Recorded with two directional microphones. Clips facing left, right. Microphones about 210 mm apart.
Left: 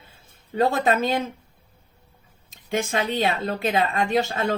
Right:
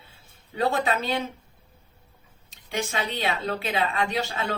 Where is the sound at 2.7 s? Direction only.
50° left (ahead or behind).